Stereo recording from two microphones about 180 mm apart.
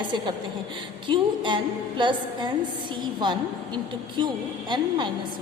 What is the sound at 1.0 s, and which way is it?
A woman's voice, 25° right (ahead or behind).